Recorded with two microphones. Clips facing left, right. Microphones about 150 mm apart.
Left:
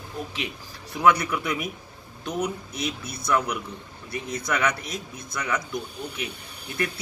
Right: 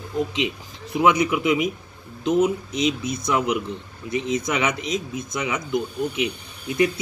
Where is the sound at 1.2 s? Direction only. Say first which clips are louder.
Right 8 dB; 15° right (ahead or behind).